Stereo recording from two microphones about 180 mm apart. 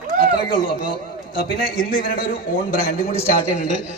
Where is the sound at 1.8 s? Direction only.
55° left (ahead or behind).